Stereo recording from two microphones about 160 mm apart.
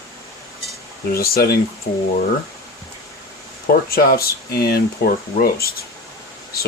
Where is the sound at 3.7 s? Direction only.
65° left (ahead or behind).